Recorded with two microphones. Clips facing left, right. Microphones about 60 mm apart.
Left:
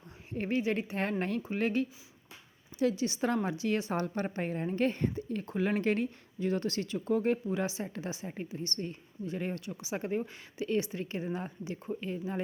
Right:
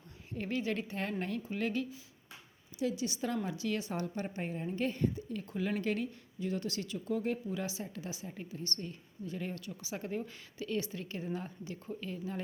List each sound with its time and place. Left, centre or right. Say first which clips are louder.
0.3 s speech: left 4 dB; left
0.9 s a woman's voice: left 4 dB; left
4.0 s a woman's voice: left 4 dB; left